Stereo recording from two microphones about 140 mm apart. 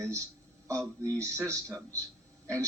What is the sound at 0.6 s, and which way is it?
Speech, 20° right (ahead or behind).